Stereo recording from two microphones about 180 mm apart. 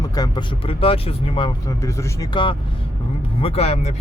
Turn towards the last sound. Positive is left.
turn(degrees=35)  # may be behind; listen again after turning